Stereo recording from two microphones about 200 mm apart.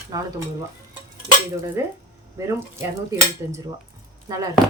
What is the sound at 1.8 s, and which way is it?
Speech, 15° right (ahead or behind).